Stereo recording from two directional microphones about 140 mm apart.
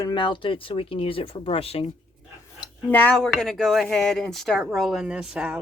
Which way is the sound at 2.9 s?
10° left (ahead or behind).